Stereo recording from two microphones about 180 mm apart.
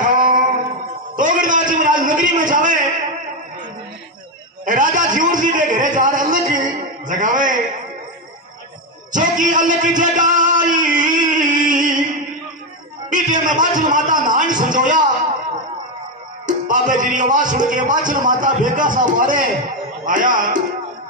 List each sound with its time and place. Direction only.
0.0 s singing: 45° right (ahead or behind)
1.1 s a man's voice: 45° right (ahead or behind)
4.6 s a sound: 45° right (ahead or behind)
7.1 s a man's voice: 45° right (ahead or behind)
9.1 s music: 45° right (ahead or behind)
13.1 s music: 45° right (ahead or behind)
13.6 s a sound: 45° right (ahead or behind)
16.4 s speech: 45° right (ahead or behind)